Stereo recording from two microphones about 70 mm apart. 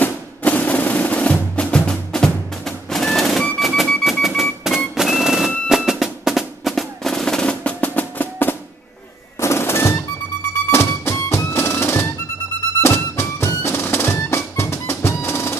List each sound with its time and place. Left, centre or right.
0.0 s percussion: left
1.9 s music: centre
5.7 s drum roll: centre; by 8.5 s left
9.4 s music: left